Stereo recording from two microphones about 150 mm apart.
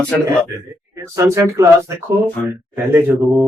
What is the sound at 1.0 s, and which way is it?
Speech, 20° right (ahead or behind).